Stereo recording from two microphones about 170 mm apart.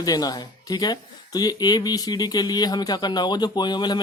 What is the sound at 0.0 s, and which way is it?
Speech, 20° left (ahead or behind).